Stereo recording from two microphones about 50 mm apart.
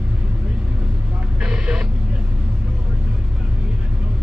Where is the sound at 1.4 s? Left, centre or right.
Centre.